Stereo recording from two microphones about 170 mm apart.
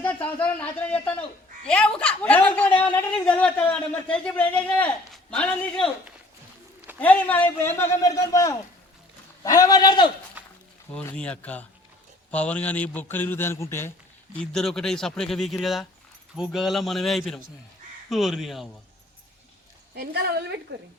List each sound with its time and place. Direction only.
0.0 s a man's voice: 10° left (ahead or behind)
7.0 s a man's voice: 10° left (ahead or behind)
10.9 s a man's voice: 5° left (ahead or behind)
14.3 s speech: 5° left (ahead or behind)
19.9 s a woman's voice: 75° right (ahead or behind)